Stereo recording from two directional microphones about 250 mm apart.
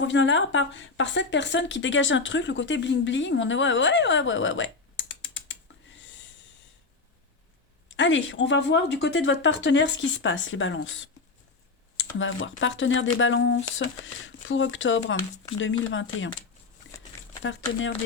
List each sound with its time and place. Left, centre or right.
0.0 s a woman's voice: left
7.9 s a woman's voice: left
12.2 s a woman's voice: left
17.4 s a woman's voice: left